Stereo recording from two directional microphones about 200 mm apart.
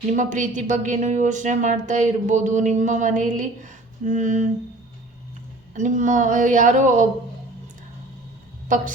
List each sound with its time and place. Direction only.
0.2 s a woman's voice: 40° right (ahead or behind)
5.7 s a woman's voice: 40° right (ahead or behind)